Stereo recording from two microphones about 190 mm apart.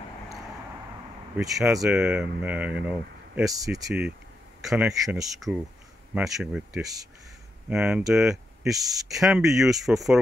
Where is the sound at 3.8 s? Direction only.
5° right (ahead or behind).